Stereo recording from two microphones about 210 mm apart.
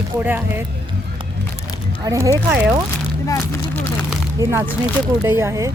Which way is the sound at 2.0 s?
15° right (ahead or behind).